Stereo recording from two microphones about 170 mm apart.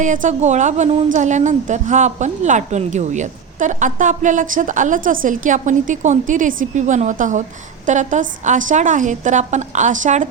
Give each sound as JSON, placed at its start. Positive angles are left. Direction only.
{"t": 0.0, "sound": "a woman's voice", "side_deg": -45}